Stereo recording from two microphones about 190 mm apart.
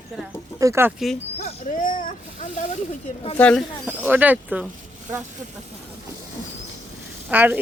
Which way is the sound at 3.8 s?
10° right (ahead or behind).